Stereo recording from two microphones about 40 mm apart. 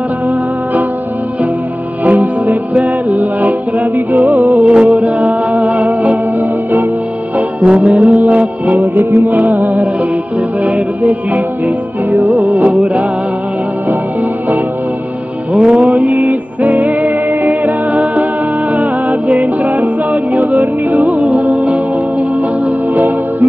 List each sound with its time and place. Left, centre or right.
2.0 s music: right
4.6 s music: right
7.3 s music: right
15.5 s music: right